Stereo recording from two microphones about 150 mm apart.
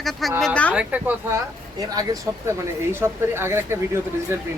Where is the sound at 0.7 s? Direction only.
10° right (ahead or behind).